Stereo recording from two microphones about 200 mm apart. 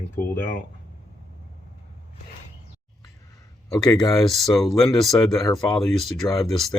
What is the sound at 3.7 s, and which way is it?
Speech, 15° left (ahead or behind).